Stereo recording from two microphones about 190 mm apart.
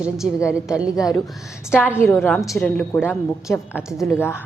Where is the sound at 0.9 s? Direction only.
20° left (ahead or behind).